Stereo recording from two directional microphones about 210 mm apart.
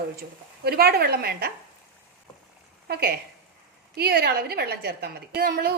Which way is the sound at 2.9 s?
50° right (ahead or behind).